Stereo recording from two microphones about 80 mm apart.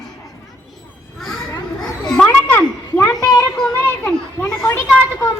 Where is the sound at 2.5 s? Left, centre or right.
Left.